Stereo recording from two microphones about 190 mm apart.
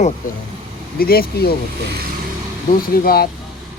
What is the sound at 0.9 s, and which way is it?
Speech, 55° left (ahead or behind).